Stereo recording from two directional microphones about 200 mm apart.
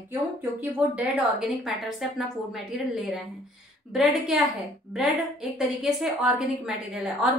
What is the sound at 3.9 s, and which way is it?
Speech, centre (ahead or behind).